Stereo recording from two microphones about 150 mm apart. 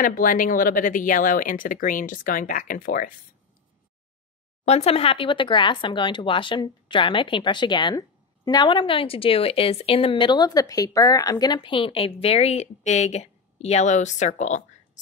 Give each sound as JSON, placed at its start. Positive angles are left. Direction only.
{"t": 0.0, "sound": "speech", "side_deg": 65}
{"t": 4.6, "sound": "a woman's voice", "side_deg": 45}